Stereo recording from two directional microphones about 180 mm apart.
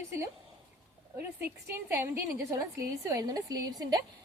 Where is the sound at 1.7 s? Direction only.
15° right (ahead or behind).